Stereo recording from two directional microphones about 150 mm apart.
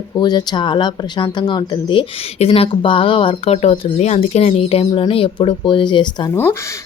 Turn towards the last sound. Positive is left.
turn(degrees=30)  # may be behind; listen again after turning